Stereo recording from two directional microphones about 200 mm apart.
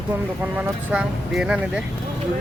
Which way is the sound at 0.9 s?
5° right (ahead or behind).